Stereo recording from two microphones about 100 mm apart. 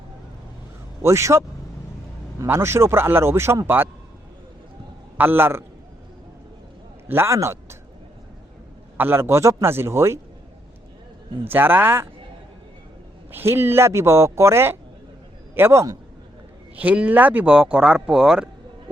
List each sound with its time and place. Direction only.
1.0 s speech: 30° right (ahead or behind)
5.1 s speech: 20° right (ahead or behind)
7.1 s a man's voice: 25° right (ahead or behind)
9.0 s speech: 20° right (ahead or behind)
11.4 s speech: 20° right (ahead or behind)
13.3 s speech: 25° right (ahead or behind)
16.7 s speech: 15° right (ahead or behind)